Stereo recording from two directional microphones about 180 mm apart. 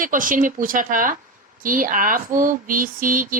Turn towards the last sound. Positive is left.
turn(degrees=-50)  # may be behind; listen again after turning